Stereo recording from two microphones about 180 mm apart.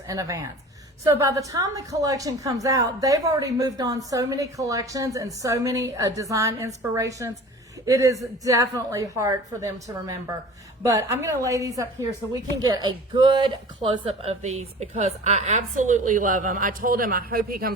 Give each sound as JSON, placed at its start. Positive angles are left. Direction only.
{"t": 0.1, "sound": "a woman's voice", "side_deg": -20}
{"t": 10.8, "sound": "speech", "side_deg": -15}